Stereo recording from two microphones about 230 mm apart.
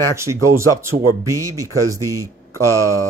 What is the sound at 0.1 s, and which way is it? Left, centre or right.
Speech, centre.